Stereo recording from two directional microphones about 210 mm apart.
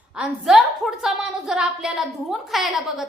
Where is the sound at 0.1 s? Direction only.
5° right (ahead or behind).